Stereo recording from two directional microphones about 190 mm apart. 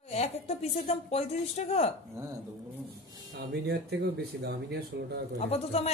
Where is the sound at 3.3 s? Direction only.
60° right (ahead or behind).